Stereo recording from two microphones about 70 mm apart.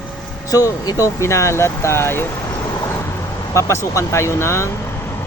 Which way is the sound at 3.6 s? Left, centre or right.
Left.